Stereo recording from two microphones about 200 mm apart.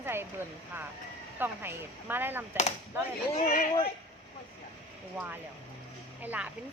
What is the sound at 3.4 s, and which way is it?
Speech, 45° left (ahead or behind).